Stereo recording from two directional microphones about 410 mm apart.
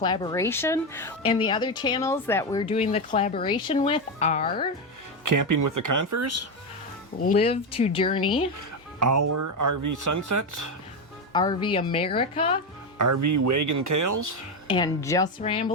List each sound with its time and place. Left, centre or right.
0.0 s a woman's voice: centre
5.2 s speech: right
7.2 s a woman's voice: centre
8.5 s speech: right
11.3 s a woman's voice: centre
13.0 s speech: right
14.7 s a woman's voice: centre